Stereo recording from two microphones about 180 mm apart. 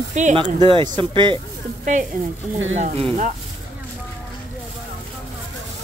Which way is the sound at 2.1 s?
50° right (ahead or behind).